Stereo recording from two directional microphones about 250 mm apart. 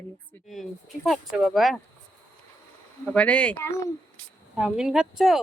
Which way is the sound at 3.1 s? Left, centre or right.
Centre.